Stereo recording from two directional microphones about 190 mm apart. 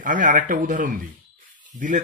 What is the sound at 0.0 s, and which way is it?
Speech, 45° right (ahead or behind).